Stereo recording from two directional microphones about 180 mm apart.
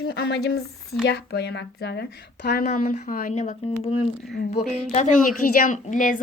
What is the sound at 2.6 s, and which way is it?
A woman's voice, 45° left (ahead or behind).